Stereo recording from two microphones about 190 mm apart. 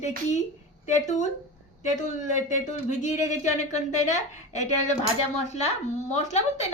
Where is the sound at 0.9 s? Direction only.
40° left (ahead or behind).